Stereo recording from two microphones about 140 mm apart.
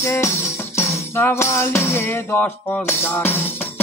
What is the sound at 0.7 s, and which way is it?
Music, 20° left (ahead or behind).